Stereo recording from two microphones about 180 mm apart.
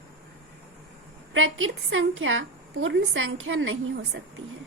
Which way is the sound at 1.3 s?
90° right.